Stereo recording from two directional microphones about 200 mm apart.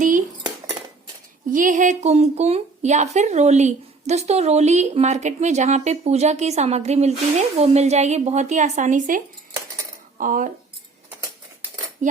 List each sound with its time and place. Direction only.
1.5 s speech: 40° right (ahead or behind)